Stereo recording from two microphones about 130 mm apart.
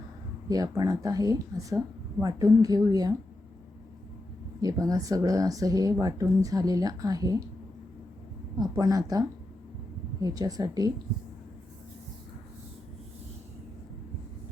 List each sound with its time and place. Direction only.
0.4 s speech: 25° right (ahead or behind)
4.6 s speech: 25° right (ahead or behind)
8.5 s speech: 30° right (ahead or behind)